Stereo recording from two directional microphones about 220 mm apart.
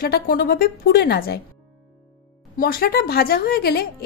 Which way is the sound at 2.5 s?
40° left (ahead or behind).